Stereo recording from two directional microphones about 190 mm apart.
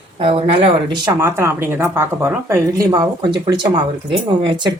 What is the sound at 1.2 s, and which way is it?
Speech, 15° right (ahead or behind).